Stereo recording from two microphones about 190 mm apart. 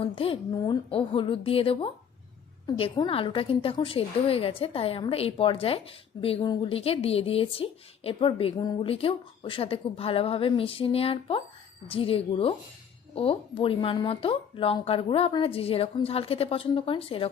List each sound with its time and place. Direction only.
0.0 s a woman's voice: 30° left (ahead or behind)